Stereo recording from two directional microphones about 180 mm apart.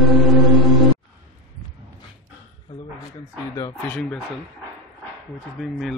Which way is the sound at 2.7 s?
25° left (ahead or behind).